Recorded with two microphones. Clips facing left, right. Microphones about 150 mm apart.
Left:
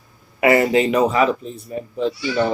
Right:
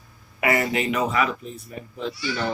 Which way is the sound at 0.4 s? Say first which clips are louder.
Left 8 dB; 25° left (ahead or behind).